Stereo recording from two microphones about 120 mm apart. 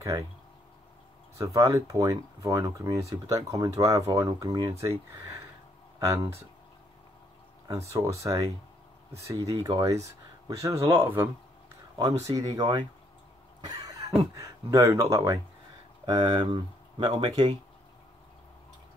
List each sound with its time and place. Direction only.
1.4 s speech: 25° right (ahead or behind)
7.6 s speech: 25° right (ahead or behind)
12.0 s speech: 30° right (ahead or behind)
16.1 s speech: 40° right (ahead or behind)